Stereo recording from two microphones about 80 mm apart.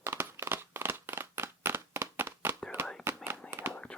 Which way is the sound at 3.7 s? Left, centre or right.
Centre.